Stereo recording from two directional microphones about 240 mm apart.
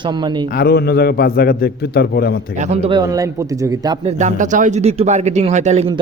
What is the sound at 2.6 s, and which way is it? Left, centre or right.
A man's voice, right.